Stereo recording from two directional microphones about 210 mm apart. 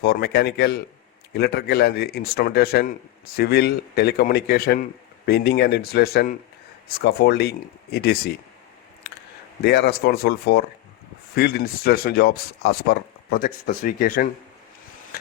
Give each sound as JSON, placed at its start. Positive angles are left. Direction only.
{"t": 0.0, "sound": "a man's voice", "side_deg": 50}
{"t": 9.6, "sound": "a man's voice", "side_deg": 50}
{"t": 15.1, "sound": "a sound", "side_deg": 45}